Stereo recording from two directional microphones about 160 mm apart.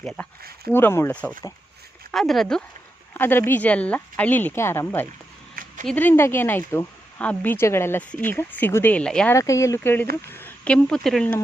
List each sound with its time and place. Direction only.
0.0 s speech: 5° left (ahead or behind)
3.2 s speech: 15° left (ahead or behind)
9.3 s speech: 20° left (ahead or behind); by 11.3 s 5° left (ahead or behind)